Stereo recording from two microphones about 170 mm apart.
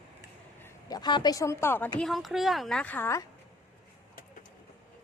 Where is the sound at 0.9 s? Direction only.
25° left (ahead or behind).